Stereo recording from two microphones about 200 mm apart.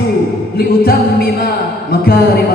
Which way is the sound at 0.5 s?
50° left (ahead or behind).